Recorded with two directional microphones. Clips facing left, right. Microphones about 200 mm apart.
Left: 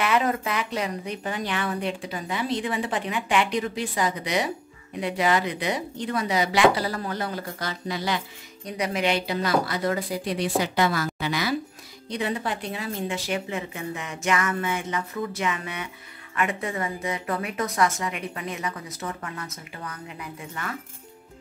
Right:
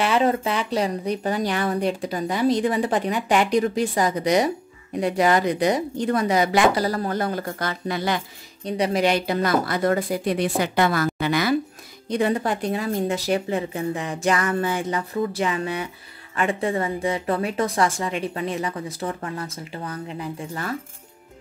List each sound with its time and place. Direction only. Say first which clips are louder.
0.0 s speech: right 4 dB; 30° right (ahead or behind); by 8.2 s 55° right (ahead or behind)
8.6 s speech: right 5 dB; 30° right (ahead or behind)